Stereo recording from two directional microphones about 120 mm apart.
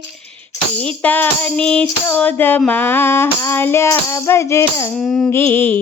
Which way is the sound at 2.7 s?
15° left (ahead or behind).